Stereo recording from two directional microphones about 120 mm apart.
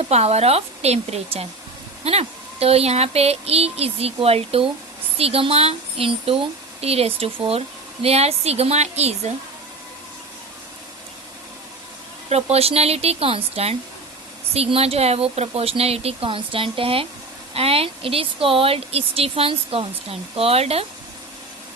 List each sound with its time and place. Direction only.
0.0 s speech: 60° right (ahead or behind)
12.3 s speech: 60° right (ahead or behind)